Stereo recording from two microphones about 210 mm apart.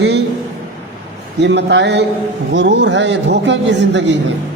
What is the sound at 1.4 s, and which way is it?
A man's voice, 55° right (ahead or behind).